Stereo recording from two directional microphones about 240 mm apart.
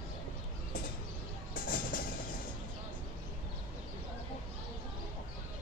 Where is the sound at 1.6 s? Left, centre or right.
Left.